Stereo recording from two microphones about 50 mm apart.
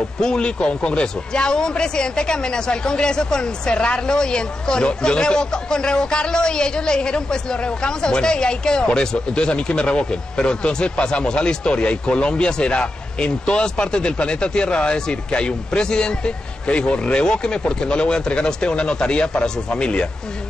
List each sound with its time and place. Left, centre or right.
0.2 s speech: centre